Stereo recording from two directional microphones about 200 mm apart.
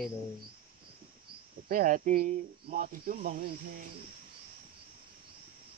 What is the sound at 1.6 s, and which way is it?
Speech, 45° right (ahead or behind).